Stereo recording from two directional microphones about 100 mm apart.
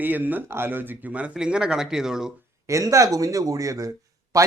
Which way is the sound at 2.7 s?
30° right (ahead or behind).